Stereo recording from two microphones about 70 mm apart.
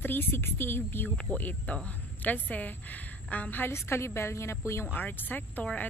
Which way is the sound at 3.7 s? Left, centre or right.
Left.